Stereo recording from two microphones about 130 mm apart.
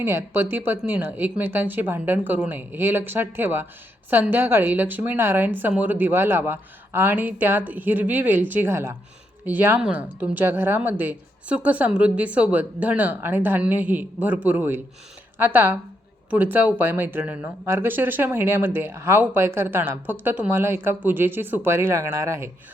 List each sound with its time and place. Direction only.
0.0 s speech: 20° right (ahead or behind)